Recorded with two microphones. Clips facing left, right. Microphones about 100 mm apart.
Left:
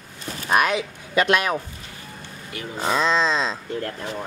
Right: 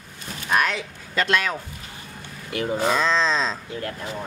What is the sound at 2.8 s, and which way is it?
Speech, 5° left (ahead or behind).